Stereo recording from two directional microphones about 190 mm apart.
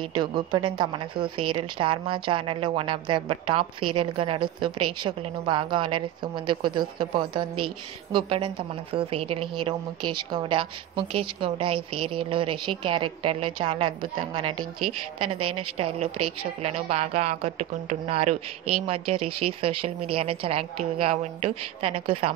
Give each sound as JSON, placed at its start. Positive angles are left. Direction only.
{"t": 0.1, "sound": "a woman's voice", "side_deg": -25}
{"t": 15.8, "sound": "a woman's voice", "side_deg": -30}